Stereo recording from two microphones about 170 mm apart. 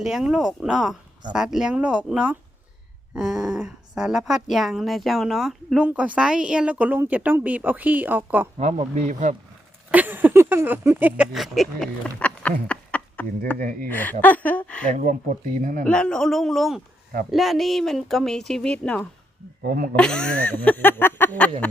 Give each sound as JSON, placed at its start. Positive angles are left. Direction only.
{"t": 0.0, "sound": "a woman's voice", "side_deg": -5}
{"t": 8.5, "sound": "speech", "side_deg": -40}
{"t": 9.9, "sound": "speech", "side_deg": -10}
{"t": 12.0, "sound": "a sound", "side_deg": 10}
{"t": 13.8, "sound": "a woman's voice", "side_deg": 10}
{"t": 14.9, "sound": "speech", "side_deg": -50}
{"t": 15.8, "sound": "a woman's voice", "side_deg": 5}
{"t": 19.6, "sound": "speech", "side_deg": -60}
{"t": 20.0, "sound": "a woman's voice", "side_deg": 5}